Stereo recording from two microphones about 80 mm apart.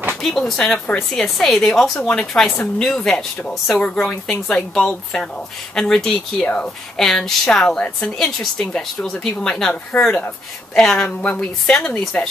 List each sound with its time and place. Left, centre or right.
0.1 s a woman's voice: centre
2.0 s a woman's voice: centre